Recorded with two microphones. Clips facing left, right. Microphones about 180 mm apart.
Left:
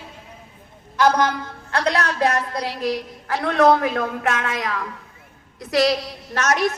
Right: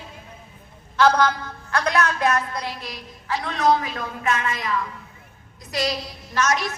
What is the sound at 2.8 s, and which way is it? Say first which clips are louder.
A woman's voice: left 9 dB; 65° left (ahead or behind).